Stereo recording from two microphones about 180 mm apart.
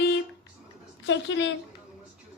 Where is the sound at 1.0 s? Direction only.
85° left.